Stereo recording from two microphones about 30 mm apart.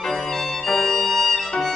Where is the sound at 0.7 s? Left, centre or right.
Centre.